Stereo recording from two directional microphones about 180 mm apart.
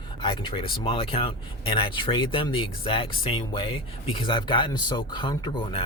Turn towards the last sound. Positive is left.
turn(degrees=25)  # may be behind; listen again after turning